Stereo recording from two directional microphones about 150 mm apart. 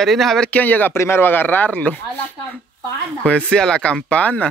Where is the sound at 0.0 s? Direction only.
Centre (ahead or behind).